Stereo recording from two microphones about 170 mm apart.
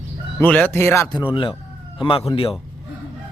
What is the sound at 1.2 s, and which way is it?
Speech, 30° left (ahead or behind).